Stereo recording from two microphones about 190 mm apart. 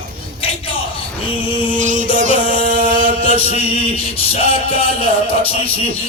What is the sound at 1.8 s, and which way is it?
Music, 40° right (ahead or behind).